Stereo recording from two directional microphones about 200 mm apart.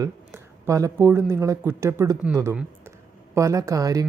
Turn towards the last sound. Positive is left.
turn(degrees=-15)  # may be behind; listen again after turning